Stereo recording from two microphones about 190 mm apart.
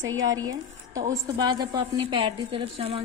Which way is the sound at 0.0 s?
90° right.